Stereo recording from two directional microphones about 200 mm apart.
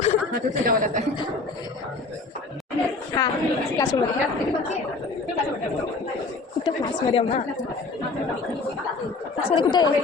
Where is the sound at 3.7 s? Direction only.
15° left (ahead or behind).